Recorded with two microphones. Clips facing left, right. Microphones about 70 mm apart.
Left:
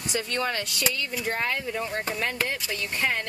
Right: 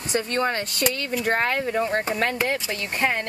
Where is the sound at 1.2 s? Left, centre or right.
Right.